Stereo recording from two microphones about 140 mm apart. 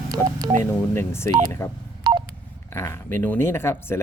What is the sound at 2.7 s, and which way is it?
Speech, 20° left (ahead or behind).